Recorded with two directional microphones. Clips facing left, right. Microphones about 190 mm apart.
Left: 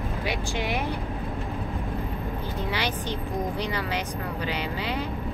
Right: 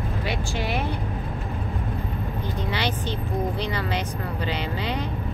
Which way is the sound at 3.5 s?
10° left (ahead or behind).